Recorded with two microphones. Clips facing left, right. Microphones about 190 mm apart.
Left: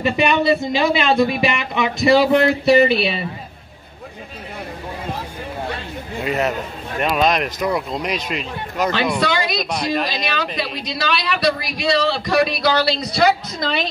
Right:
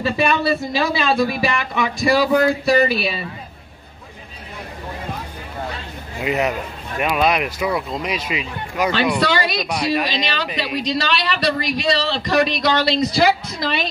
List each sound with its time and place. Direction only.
0.0 s speech: 20° left (ahead or behind)
6.2 s speech: 15° right (ahead or behind)
9.3 s speech: 10° left (ahead or behind)
9.7 s speech: 10° right (ahead or behind)
10.9 s a woman's voice: 10° left (ahead or behind)